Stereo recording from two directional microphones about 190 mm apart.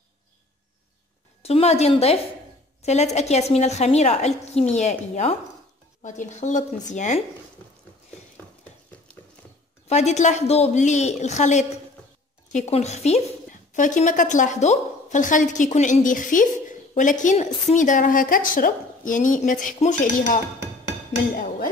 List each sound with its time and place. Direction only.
1.4 s a woman's voice: 35° left (ahead or behind)
9.8 s a woman's voice: 35° left (ahead or behind)